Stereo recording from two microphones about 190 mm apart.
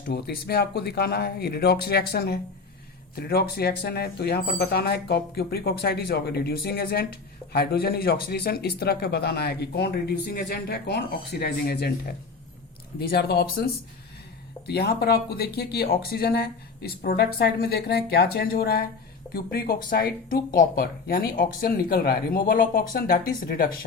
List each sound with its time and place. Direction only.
0.1 s speech: 55° left (ahead or behind)
14.7 s speech: 55° left (ahead or behind)